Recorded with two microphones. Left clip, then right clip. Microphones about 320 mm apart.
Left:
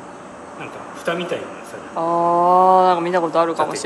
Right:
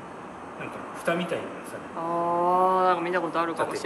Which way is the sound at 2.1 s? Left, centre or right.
Centre.